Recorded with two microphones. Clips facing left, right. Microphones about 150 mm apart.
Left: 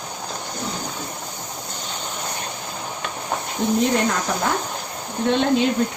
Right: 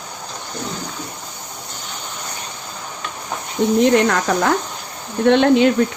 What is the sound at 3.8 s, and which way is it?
Speech, 75° right (ahead or behind).